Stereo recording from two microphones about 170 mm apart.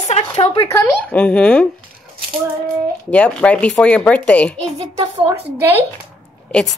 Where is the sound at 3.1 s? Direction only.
5° left (ahead or behind).